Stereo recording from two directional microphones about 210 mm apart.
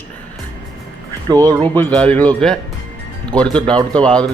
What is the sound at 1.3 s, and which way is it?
Speech, 15° right (ahead or behind).